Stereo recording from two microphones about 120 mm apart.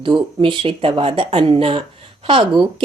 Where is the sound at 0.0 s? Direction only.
45° right (ahead or behind).